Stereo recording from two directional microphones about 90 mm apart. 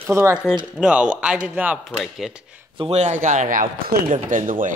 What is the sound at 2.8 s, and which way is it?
Speech, 85° right.